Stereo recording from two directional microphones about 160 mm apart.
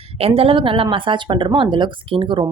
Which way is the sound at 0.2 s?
35° right (ahead or behind).